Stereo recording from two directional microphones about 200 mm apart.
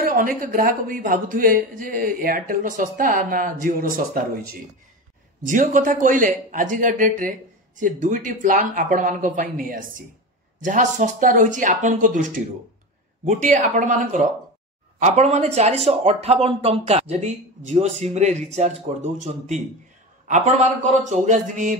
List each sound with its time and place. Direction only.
0.1 s a man's voice: 45° right (ahead or behind)